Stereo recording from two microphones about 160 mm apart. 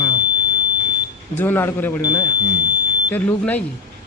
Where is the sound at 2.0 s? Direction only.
25° left (ahead or behind).